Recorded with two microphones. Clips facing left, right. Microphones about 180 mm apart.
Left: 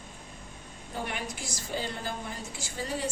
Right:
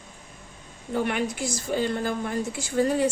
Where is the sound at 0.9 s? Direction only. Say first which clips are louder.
Right 10 dB; 70° right (ahead or behind).